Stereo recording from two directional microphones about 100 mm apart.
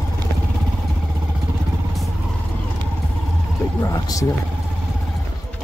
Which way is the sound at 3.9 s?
40° left (ahead or behind).